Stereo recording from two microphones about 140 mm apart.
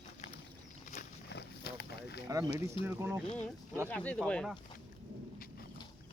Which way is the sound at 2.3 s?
25° right (ahead or behind).